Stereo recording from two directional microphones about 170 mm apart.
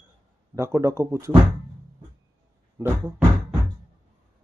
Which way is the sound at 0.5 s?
15° right (ahead or behind).